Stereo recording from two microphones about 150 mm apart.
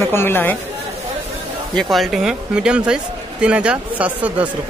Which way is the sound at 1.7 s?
Centre (ahead or behind).